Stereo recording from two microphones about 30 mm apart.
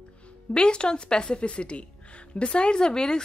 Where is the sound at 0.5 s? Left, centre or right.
Left.